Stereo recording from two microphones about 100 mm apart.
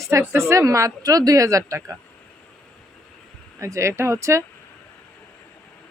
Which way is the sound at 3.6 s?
30° right (ahead or behind).